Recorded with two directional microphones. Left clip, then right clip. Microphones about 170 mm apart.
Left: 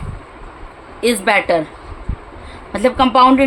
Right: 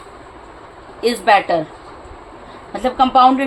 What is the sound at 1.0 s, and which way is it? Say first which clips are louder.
Speech: right 1 dB; 45° left (ahead or behind).